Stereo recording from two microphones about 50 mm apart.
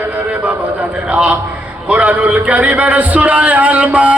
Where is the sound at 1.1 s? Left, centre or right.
Right.